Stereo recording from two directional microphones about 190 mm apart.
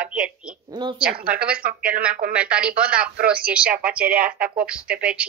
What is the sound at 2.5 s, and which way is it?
Speech, 5° right (ahead or behind).